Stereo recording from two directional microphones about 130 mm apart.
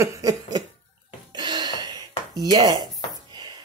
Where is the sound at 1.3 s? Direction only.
35° right (ahead or behind).